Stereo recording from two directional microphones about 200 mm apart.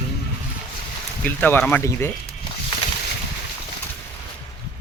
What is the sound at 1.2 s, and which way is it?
Speech, 10° left (ahead or behind).